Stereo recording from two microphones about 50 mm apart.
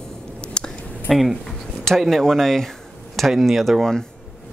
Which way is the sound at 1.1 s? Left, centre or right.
Centre.